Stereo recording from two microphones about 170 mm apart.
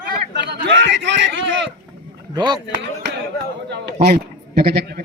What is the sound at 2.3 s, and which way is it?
Speech, 25° right (ahead or behind).